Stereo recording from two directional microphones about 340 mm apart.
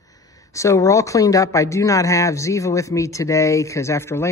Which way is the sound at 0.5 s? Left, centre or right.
Centre.